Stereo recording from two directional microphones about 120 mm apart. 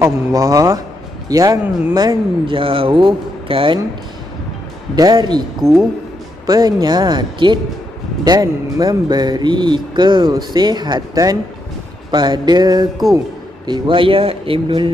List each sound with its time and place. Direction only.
0.0 s speech: 30° right (ahead or behind)
2.5 s speech: 50° right (ahead or behind)
4.9 s speech: 35° right (ahead or behind)
5.6 s speech: centre (ahead or behind)
6.4 s speech: 35° right (ahead or behind)
13.7 s speech: 45° right (ahead or behind)